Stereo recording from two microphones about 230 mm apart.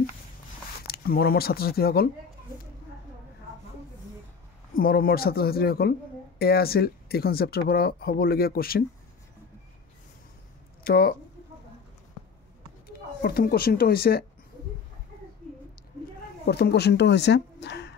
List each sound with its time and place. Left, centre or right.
0.8 s speech: left
4.7 s speech: left
10.8 s speech: left
12.8 s speech: left
16.4 s a woman's voice: left